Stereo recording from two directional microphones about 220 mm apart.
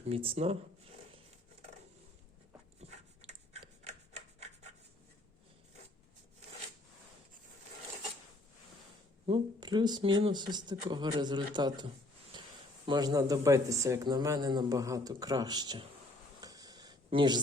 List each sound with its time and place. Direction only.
0.1 s speech: 25° right (ahead or behind)
3.2 s rub: 30° right (ahead or behind)
9.2 s speech: 20° right (ahead or behind)
16.4 s a sound: 15° right (ahead or behind)